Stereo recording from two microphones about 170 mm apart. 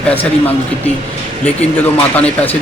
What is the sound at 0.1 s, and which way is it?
Speech, 10° left (ahead or behind).